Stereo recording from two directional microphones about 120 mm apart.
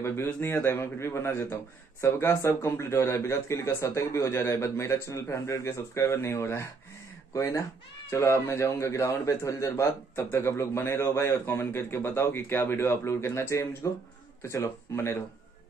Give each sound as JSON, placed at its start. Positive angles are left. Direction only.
{"t": 0.0, "sound": "a man's voice", "side_deg": 20}